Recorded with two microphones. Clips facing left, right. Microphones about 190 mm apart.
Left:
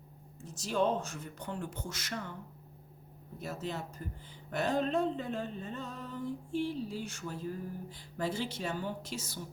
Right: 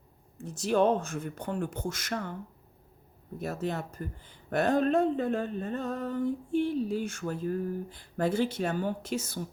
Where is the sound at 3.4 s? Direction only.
55° right (ahead or behind).